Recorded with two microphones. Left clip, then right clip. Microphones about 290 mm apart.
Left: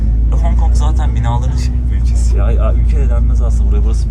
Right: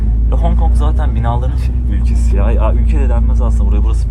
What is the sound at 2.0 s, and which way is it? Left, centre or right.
Vehicle, centre.